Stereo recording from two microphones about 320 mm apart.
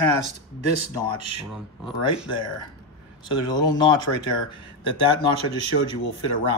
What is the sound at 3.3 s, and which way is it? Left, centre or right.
Speech, centre.